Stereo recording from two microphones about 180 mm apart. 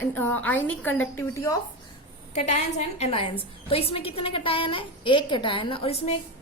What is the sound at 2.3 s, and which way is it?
A woman's voice, 40° left (ahead or behind).